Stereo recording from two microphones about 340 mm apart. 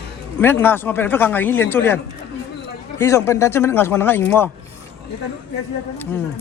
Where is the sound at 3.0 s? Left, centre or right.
Centre.